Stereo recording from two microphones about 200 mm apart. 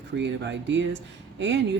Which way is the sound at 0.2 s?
65° right (ahead or behind).